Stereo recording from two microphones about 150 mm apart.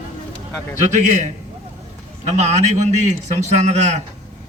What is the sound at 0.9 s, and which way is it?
Speech, 50° right (ahead or behind).